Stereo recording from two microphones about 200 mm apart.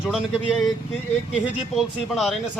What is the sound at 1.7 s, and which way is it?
Speech, centre (ahead or behind).